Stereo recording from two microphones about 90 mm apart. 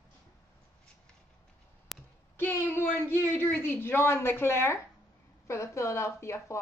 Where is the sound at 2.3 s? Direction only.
25° left (ahead or behind).